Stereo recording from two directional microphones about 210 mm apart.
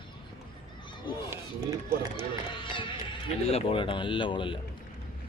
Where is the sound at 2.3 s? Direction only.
25° left (ahead or behind).